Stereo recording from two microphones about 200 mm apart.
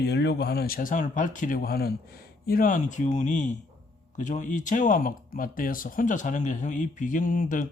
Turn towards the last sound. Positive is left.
turn(degrees=40)  # may be behind; listen again after turning